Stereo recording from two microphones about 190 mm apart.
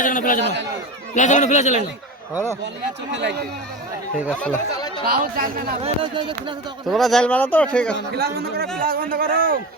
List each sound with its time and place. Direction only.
0.0 s a sound: 45° left (ahead or behind)
0.4 s speech: 65° right (ahead or behind)
1.1 s speech: 40° left (ahead or behind)
3.1 s speech: 70° right (ahead or behind)
4.4 s speech: 5° left (ahead or behind)
4.7 s chatter: 20° left (ahead or behind)
5.0 s a man's voice: 50° right (ahead or behind)
5.8 s speech: 25° right (ahead or behind)
6.9 s speech: centre (ahead or behind)
8.1 s a man's voice: 55° right (ahead or behind)